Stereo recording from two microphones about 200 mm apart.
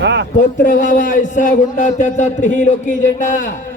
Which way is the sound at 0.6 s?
40° left (ahead or behind).